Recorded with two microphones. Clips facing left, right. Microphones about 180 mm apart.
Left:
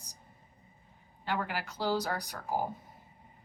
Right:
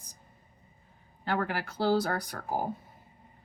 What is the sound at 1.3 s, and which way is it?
Speech, 50° right (ahead or behind).